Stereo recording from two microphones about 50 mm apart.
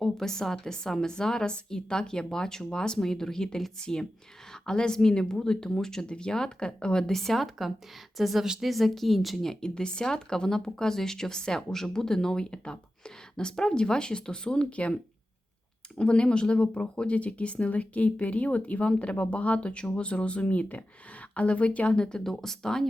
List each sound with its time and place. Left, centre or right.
0.0 s speech: centre; by 14.9 s left
16.0 s speech: centre
22.2 s speech: centre